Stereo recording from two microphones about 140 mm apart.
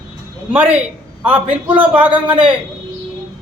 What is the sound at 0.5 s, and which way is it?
Speech, 10° right (ahead or behind).